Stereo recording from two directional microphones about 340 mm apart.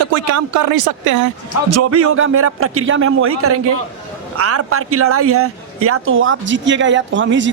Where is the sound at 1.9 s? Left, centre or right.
Right.